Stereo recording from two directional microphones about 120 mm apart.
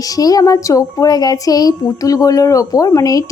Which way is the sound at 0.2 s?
30° left (ahead or behind).